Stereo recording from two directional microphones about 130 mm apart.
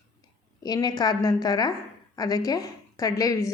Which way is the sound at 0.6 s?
30° left (ahead or behind).